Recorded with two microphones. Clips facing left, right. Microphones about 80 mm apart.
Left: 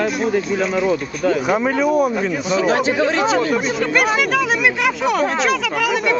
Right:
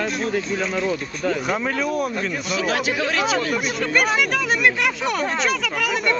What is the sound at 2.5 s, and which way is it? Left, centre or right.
Speech, left.